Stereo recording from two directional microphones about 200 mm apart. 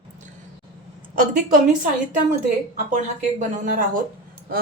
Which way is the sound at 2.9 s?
40° right (ahead or behind).